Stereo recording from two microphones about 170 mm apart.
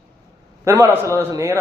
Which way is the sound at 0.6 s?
15° right (ahead or behind).